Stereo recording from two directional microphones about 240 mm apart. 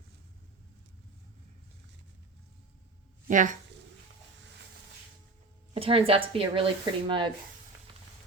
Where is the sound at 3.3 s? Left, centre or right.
Right.